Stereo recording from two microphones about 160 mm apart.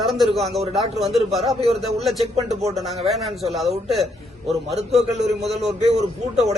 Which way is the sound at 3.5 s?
Centre (ahead or behind).